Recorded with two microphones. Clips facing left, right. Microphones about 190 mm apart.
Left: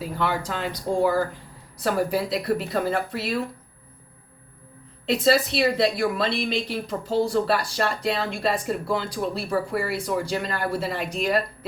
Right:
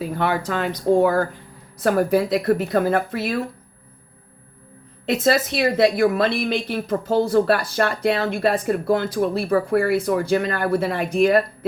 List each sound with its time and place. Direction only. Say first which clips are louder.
0.2 s a woman's voice: right 4 dB; 50° right (ahead or behind)
5.0 s a woman's voice: right 1 dB; 50° right (ahead or behind)